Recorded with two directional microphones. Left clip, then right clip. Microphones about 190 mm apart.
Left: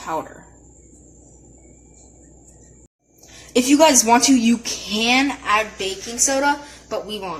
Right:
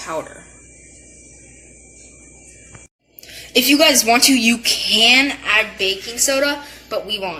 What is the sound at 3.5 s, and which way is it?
Speech, 50° left (ahead or behind).